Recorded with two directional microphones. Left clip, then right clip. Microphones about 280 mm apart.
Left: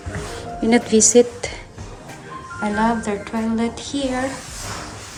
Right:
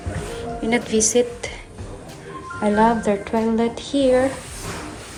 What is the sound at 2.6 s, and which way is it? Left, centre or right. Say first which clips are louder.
A woman's voice: right 3 dB; centre.